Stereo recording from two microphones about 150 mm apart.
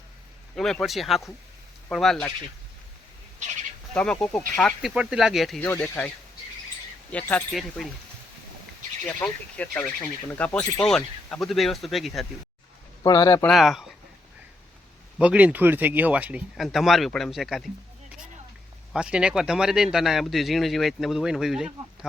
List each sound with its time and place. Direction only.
0.5 s speech: 5° left (ahead or behind)
3.4 s speech: 55° right (ahead or behind)
3.9 s speech: 5° left (ahead or behind)
5.5 s speech: 10° left (ahead or behind)
7.1 s speech: 10° left (ahead or behind)
9.2 s speech: 10° left (ahead or behind)
13.0 s speech: 25° left (ahead or behind)
13.5 s speech: centre (ahead or behind)
15.2 s speech: 10° right (ahead or behind)
18.9 s speech: 5° right (ahead or behind)